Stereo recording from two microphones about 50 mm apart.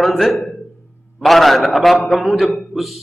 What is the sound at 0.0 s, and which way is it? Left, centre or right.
A man's voice, centre.